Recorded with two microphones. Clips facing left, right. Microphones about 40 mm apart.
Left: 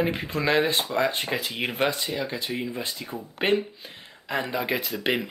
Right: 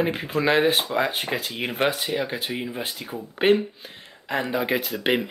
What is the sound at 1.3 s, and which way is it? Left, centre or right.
Speech, centre.